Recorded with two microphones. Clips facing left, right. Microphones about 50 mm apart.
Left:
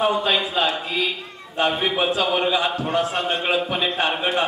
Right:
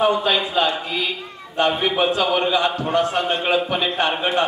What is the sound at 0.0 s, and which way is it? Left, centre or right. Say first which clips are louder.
A man's voice: right 2 dB; centre.